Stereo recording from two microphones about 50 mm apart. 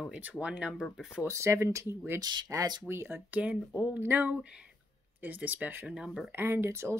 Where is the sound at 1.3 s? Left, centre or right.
Right.